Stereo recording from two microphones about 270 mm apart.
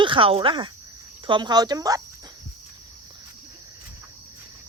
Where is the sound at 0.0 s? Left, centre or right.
Centre.